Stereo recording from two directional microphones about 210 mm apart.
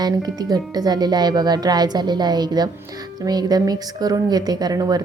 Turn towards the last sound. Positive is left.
turn(degrees=-20)  # may be behind; listen again after turning